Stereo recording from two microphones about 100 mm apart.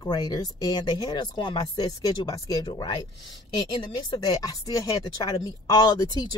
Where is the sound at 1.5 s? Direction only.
40° left (ahead or behind).